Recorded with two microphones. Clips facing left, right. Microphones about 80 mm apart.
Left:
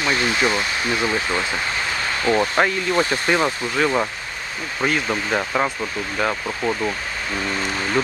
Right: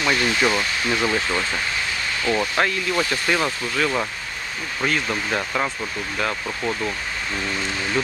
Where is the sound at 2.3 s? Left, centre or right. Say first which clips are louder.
Left 3 dB; left.